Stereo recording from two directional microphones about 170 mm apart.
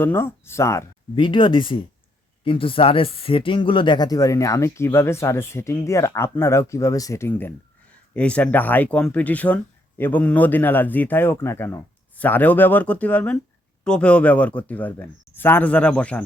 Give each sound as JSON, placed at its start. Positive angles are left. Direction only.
{"t": 0.0, "sound": "speech", "side_deg": 15}
{"t": 1.1, "sound": "speech", "side_deg": 30}